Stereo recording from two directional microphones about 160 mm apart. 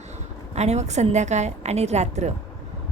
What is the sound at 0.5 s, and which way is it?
A woman's voice, 45° right (ahead or behind).